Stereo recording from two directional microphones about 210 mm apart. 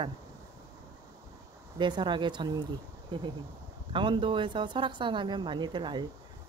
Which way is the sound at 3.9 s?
25° right (ahead or behind).